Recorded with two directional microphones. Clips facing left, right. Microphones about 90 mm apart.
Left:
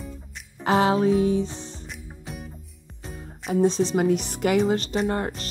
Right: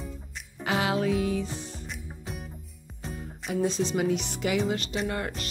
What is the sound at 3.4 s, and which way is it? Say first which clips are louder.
Speech: left 6 dB; 35° left (ahead or behind).